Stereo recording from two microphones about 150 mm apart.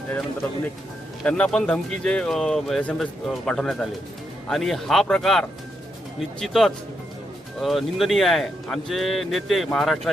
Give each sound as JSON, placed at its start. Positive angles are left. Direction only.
{"t": 1.2, "sound": "speech", "side_deg": 5}